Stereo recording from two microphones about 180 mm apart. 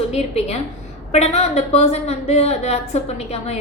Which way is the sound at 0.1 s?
35° left (ahead or behind).